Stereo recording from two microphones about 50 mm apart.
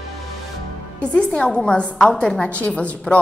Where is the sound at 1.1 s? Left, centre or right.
Left.